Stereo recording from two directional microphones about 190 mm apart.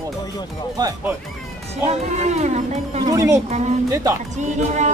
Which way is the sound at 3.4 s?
35° right (ahead or behind).